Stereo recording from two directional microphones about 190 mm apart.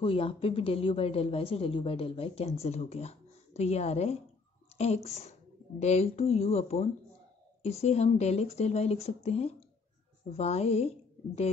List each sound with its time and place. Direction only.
0.0 s a woman's voice: 30° left (ahead or behind)